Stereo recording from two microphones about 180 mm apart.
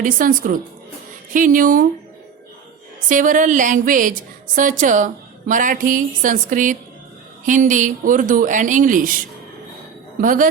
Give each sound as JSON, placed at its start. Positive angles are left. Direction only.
{"t": 0.0, "sound": "a woman's voice", "side_deg": -50}
{"t": 3.1, "sound": "a woman's voice", "side_deg": -45}
{"t": 10.2, "sound": "a woman's voice", "side_deg": -50}